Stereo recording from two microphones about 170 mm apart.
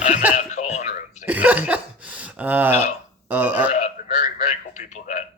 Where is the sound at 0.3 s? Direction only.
45° left (ahead or behind).